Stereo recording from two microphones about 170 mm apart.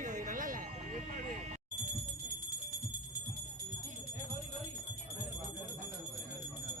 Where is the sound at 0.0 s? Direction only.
45° right (ahead or behind).